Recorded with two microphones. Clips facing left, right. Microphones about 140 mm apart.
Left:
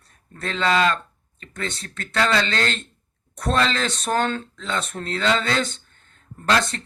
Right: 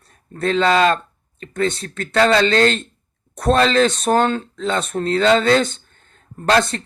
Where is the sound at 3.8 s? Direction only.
25° right (ahead or behind).